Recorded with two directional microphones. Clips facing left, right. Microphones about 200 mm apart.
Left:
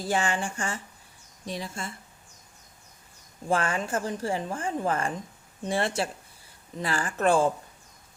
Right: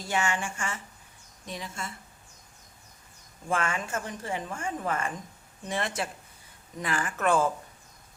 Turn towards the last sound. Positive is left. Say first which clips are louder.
# left 3 dB
turn(degrees=30)  # may be behind; listen again after turning